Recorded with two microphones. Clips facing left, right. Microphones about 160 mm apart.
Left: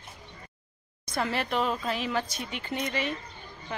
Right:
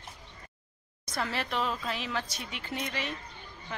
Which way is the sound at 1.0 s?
Centre (ahead or behind).